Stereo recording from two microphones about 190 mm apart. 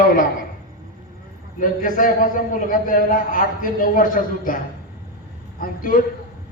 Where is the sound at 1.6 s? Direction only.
45° left (ahead or behind).